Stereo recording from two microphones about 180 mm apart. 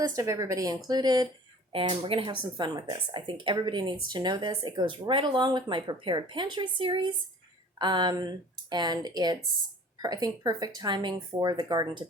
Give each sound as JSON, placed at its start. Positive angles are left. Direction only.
{"t": 0.0, "sound": "speech", "side_deg": -20}